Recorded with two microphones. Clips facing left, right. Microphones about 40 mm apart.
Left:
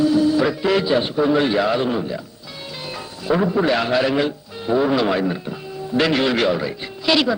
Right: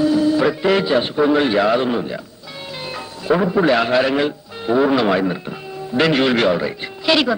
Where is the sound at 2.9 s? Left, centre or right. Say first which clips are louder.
Right 3 dB; centre.